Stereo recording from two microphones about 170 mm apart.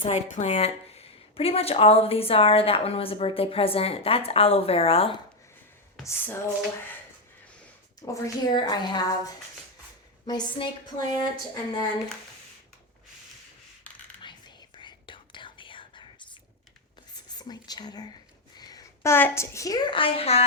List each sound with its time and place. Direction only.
0.0 s a woman's voice: 40° left (ahead or behind)
6.1 s a sound: 15° left (ahead or behind)
8.0 s a woman's voice: 20° left (ahead or behind)
14.2 s whispering: 25° left (ahead or behind)
18.5 s a woman's voice: 25° left (ahead or behind)